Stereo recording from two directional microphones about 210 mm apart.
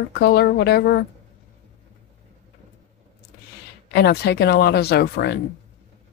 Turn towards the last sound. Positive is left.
turn(degrees=50)  # may be behind; listen again after turning